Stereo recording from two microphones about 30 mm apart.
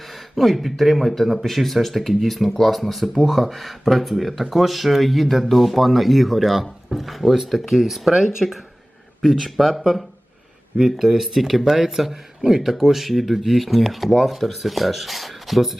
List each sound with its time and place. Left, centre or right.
0.1 s speech: centre
9.4 s speech: centre
12.8 s speech: centre